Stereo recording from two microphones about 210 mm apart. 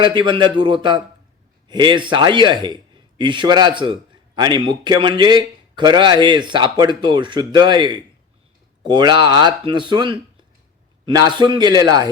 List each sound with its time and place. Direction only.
0.0 s a man's voice: 25° right (ahead or behind)